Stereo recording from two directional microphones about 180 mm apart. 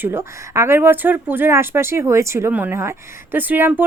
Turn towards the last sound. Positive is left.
turn(degrees=-10)  # may be behind; listen again after turning